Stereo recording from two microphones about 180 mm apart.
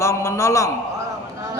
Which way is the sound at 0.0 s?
15° left (ahead or behind).